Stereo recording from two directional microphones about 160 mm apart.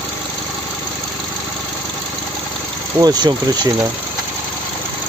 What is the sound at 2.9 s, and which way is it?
Speech, 25° right (ahead or behind).